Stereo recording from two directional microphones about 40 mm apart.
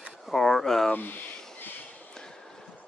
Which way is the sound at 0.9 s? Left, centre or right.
Left.